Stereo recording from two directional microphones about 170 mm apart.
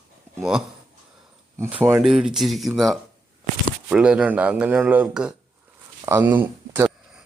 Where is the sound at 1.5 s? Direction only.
15° right (ahead or behind).